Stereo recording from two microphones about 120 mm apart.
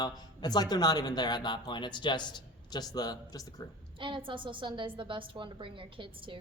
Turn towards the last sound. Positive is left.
turn(degrees=-45)  # may be behind; listen again after turning